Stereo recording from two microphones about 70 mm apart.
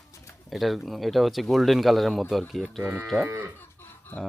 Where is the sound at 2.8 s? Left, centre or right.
Right.